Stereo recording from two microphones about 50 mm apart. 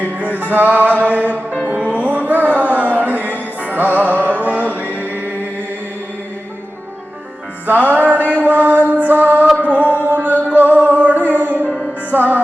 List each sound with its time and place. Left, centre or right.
0.0 s music: right
7.7 s music: right